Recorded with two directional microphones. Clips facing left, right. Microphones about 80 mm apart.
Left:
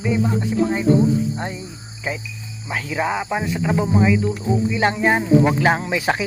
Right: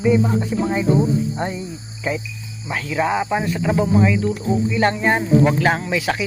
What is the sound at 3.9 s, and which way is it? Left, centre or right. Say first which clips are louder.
Speech: even; centre.